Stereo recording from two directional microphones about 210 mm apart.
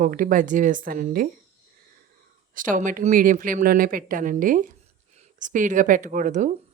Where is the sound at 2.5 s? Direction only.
40° right (ahead or behind).